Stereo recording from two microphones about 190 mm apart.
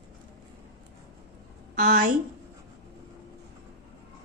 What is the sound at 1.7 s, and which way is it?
Speech, 45° right (ahead or behind).